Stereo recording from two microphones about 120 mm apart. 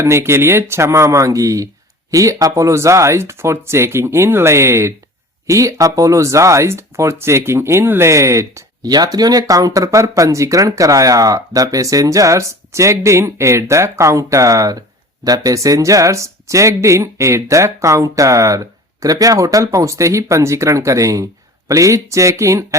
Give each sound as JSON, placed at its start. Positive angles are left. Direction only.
{"t": 0.0, "sound": "speech", "side_deg": -20}